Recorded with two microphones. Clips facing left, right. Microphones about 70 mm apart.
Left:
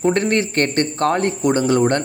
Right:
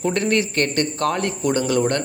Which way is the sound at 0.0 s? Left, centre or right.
Left.